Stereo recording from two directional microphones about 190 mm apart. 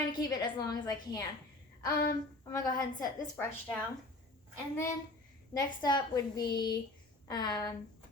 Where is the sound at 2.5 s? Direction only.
20° left (ahead or behind).